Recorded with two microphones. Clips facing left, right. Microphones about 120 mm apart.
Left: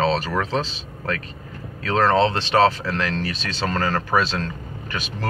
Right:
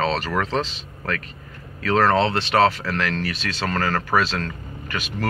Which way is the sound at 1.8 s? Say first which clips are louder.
Even; 20° left (ahead or behind).